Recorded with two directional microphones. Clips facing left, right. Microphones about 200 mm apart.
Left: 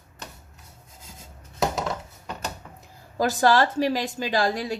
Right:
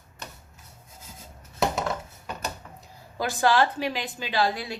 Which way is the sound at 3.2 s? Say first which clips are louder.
Left 2 dB; 40° left (ahead or behind).